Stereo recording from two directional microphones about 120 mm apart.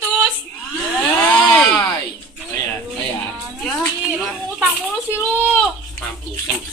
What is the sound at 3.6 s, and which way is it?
Speech, 5° left (ahead or behind).